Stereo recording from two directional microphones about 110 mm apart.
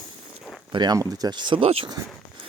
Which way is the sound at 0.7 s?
40° right (ahead or behind).